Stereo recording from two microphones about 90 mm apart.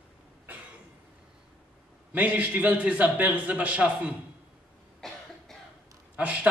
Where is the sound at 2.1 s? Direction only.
15° right (ahead or behind).